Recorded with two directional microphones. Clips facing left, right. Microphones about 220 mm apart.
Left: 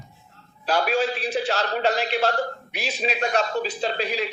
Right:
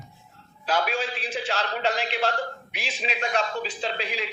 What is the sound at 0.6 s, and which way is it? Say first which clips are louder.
A man's voice: left 4 dB; 40° left (ahead or behind).